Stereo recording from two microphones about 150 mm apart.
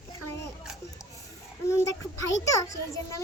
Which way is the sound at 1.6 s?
20° left (ahead or behind).